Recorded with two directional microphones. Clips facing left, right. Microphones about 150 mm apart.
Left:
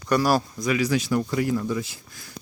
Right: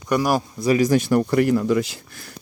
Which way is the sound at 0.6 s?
40° right (ahead or behind).